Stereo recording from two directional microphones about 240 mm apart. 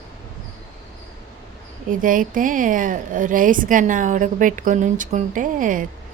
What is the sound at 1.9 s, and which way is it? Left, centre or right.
Speech, right.